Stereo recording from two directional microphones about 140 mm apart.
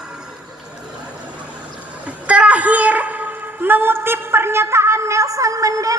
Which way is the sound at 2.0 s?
10° right (ahead or behind).